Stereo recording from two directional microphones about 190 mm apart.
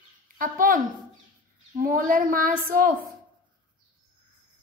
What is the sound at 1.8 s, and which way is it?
A woman's voice, 50° right (ahead or behind).